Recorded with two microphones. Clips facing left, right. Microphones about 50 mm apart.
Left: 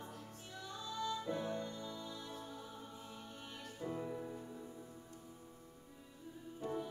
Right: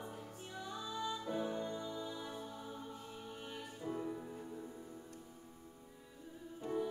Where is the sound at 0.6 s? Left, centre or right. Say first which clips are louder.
Right 1 dB; centre.